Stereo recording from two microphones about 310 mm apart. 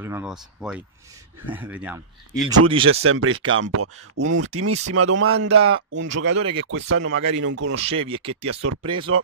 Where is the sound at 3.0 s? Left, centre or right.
Right.